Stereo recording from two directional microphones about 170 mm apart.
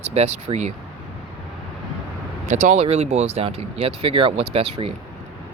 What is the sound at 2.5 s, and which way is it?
Speech, 40° right (ahead or behind).